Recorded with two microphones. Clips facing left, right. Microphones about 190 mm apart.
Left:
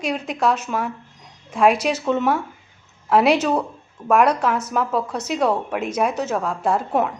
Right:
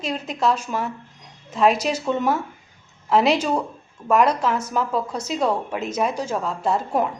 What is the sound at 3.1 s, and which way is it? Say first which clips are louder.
A woman's voice: left 2 dB; 5° left (ahead or behind).